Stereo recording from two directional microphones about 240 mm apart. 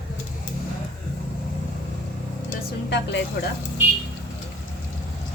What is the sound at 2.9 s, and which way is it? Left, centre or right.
Speech, left.